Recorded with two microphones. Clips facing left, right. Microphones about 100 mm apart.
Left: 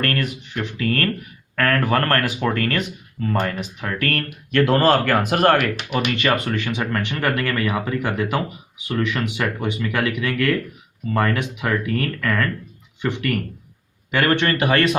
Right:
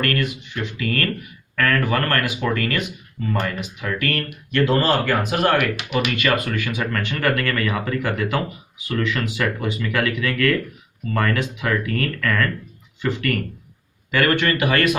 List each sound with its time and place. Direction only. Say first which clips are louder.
0.0 s speech: right 1 dB; 35° left (ahead or behind)